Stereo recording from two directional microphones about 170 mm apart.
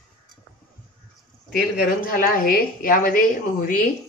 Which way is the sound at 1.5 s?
55° left (ahead or behind).